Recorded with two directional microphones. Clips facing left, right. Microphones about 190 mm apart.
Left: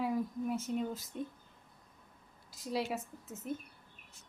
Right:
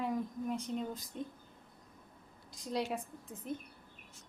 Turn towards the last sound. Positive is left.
turn(degrees=5)  # may be behind; listen again after turning